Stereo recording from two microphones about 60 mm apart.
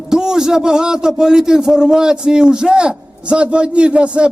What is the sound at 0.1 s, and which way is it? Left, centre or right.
A man's voice, centre.